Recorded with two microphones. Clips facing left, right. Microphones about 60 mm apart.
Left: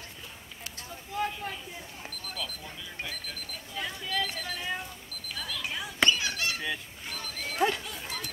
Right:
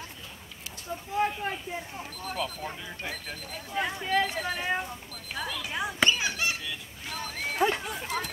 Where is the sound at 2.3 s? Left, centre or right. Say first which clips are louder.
Right 8 dB; right.